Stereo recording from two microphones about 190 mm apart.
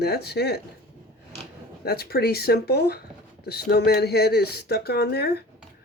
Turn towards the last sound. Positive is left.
turn(degrees=55)  # may be behind; listen again after turning